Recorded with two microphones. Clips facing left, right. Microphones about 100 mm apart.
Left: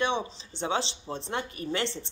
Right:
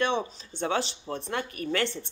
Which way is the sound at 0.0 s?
20° left (ahead or behind).